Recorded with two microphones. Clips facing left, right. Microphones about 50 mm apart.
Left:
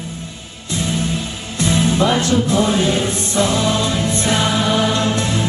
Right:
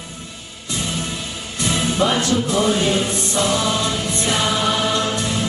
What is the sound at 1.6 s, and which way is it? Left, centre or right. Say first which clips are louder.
Music: left 3 dB; left.